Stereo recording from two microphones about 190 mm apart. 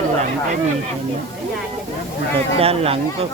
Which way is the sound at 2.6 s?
30° right (ahead or behind).